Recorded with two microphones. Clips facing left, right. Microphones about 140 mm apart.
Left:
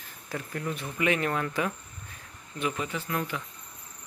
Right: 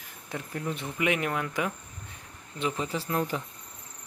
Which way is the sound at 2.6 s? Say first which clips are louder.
Right 1 dB; 25° right (ahead or behind).